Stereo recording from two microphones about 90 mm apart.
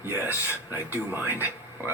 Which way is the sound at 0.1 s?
25° right (ahead or behind).